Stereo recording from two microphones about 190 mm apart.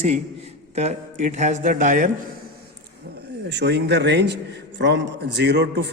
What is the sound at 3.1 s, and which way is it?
Speech, 60° right (ahead or behind).